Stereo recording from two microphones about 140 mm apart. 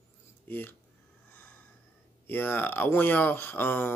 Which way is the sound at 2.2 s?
15° left (ahead or behind).